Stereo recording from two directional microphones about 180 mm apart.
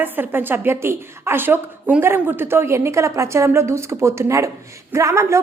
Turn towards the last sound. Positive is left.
turn(degrees=-15)  # may be behind; listen again after turning